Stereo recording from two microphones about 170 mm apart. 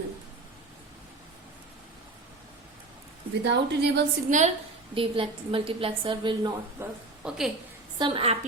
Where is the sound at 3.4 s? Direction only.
90° right.